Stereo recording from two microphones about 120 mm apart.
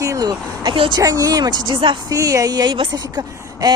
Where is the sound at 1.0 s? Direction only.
30° right (ahead or behind).